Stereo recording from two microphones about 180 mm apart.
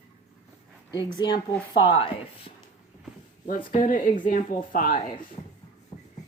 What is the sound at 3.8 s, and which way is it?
Speech, 50° left (ahead or behind).